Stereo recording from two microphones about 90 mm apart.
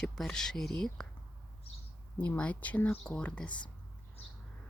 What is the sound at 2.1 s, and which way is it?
Speech, 15° left (ahead or behind).